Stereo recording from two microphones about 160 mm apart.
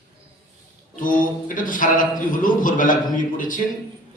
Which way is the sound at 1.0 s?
55° left (ahead or behind).